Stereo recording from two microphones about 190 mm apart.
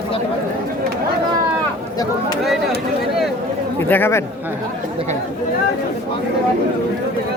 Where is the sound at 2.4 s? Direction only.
Centre (ahead or behind).